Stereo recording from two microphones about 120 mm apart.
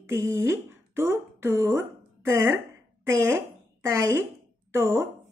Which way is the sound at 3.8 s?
25° right (ahead or behind).